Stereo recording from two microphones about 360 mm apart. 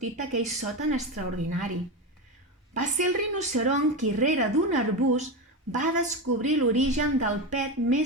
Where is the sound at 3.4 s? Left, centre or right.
Centre.